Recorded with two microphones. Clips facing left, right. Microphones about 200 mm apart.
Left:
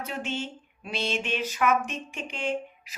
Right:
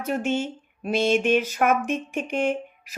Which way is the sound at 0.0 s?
50° right (ahead or behind).